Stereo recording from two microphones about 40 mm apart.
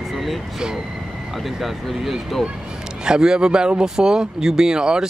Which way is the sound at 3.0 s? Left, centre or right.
Centre.